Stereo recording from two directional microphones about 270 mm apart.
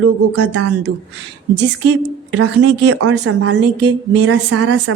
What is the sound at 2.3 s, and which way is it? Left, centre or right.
Speech, right.